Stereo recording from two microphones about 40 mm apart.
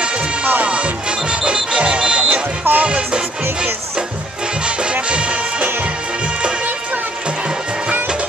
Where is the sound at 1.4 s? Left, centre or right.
Right.